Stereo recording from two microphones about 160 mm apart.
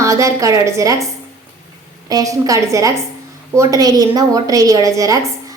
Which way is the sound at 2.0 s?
25° right (ahead or behind).